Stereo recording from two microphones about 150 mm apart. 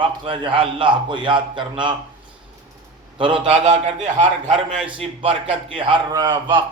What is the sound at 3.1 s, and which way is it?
A man's voice, 35° right (ahead or behind).